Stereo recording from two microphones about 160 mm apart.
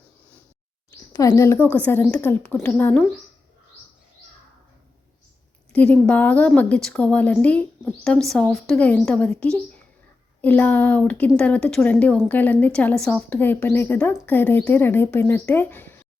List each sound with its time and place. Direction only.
1.1 s a woman's voice: 20° left (ahead or behind)
5.7 s a woman's voice: 10° left (ahead or behind)